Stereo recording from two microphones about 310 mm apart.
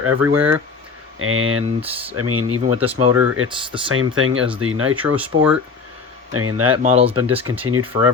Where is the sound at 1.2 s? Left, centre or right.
Right.